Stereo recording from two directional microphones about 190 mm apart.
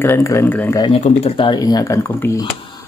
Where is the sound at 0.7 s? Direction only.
30° left (ahead or behind); by 2.4 s 15° left (ahead or behind).